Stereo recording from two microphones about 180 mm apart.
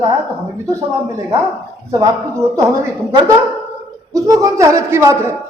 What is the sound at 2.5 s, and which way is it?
Speech, 20° right (ahead or behind).